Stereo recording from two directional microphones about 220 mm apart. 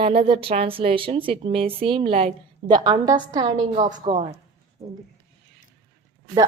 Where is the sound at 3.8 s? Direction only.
30° right (ahead or behind).